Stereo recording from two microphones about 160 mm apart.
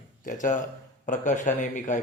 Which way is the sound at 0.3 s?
55° left (ahead or behind).